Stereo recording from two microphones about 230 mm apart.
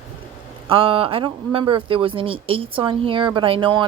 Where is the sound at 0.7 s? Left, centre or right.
Right.